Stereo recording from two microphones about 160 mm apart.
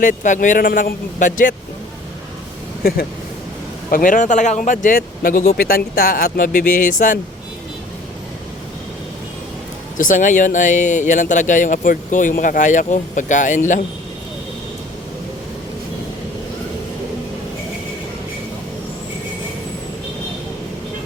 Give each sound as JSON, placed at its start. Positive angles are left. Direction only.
{"t": 0.0, "sound": "speech", "side_deg": 55}
{"t": 3.9, "sound": "speech", "side_deg": 55}
{"t": 10.0, "sound": "speech", "side_deg": 55}